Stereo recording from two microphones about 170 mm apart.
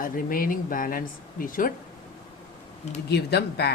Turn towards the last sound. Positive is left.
turn(degrees=75)  # may be behind; listen again after turning